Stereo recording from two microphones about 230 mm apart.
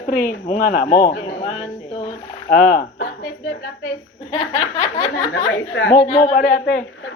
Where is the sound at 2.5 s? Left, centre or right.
Left.